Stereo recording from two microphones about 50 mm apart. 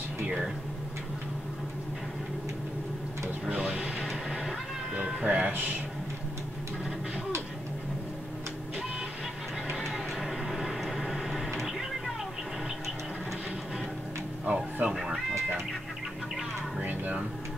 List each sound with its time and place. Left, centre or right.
3.4 s printer: right
4.0 s music: centre
5.2 s music: right
9.7 s a sound: centre
14.4 s music: right